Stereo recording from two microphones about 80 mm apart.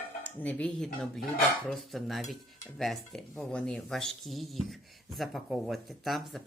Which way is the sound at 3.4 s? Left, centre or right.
Centre.